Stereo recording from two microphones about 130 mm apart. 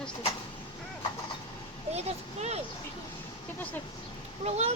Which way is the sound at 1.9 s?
55° right (ahead or behind).